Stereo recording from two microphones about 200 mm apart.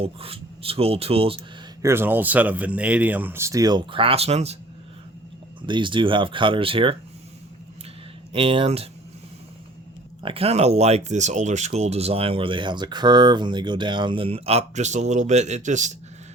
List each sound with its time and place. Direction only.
0.0 s speech: 30° right (ahead or behind)
1.8 s speech: 10° right (ahead or behind); by 4.5 s 30° right (ahead or behind)
5.6 s speech: 25° right (ahead or behind)
8.3 s speech: 25° right (ahead or behind)
10.2 s speech: 30° right (ahead or behind)